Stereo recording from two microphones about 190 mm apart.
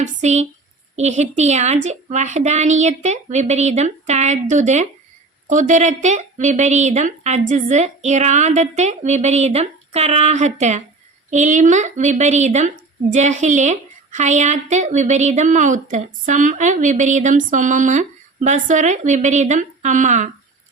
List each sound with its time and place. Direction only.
0.0 s a woman's voice: 35° right (ahead or behind)